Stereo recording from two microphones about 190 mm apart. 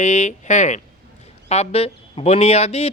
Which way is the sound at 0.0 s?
35° left (ahead or behind).